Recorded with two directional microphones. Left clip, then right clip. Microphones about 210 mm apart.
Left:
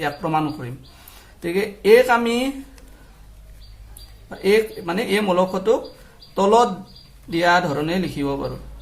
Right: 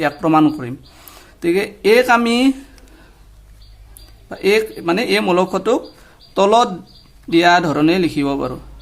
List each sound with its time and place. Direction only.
0.0 s speech: 45° right (ahead or behind)
4.3 s speech: 45° right (ahead or behind)